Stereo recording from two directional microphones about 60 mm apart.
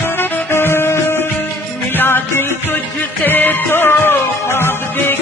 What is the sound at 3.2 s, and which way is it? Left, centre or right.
Music, left.